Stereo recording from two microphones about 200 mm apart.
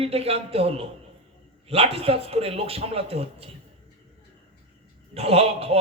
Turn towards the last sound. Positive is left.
turn(degrees=-30)  # may be behind; listen again after turning